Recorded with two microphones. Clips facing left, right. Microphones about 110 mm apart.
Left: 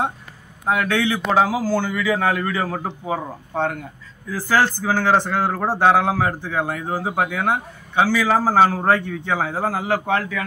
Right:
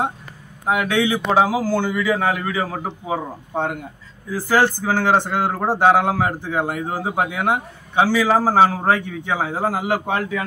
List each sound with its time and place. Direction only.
0.7 s a man's voice: 15° right (ahead or behind)